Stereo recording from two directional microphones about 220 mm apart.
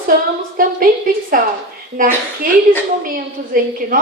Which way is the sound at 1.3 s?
40° right (ahead or behind).